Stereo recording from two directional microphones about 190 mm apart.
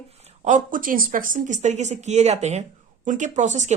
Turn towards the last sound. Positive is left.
turn(degrees=-40)  # may be behind; listen again after turning